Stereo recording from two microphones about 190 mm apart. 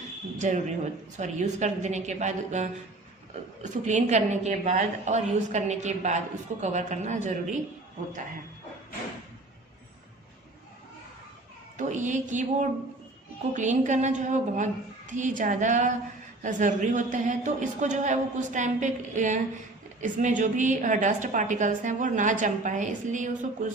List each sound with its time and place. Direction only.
0.3 s a woman's voice: 40° right (ahead or behind)
11.8 s a woman's voice: 40° right (ahead or behind)